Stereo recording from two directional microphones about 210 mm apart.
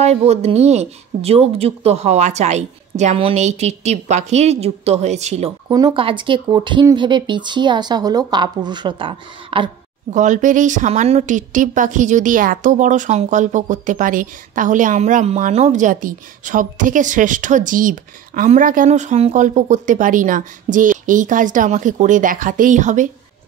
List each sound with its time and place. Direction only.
0.0 s a woman's voice: 30° right (ahead or behind)
5.7 s speech: 20° right (ahead or behind)
10.1 s a woman's voice: 35° right (ahead or behind)